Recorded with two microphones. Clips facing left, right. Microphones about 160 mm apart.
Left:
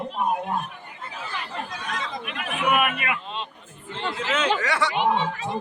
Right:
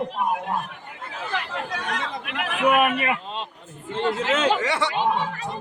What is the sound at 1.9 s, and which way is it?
Chatter, 70° right (ahead or behind).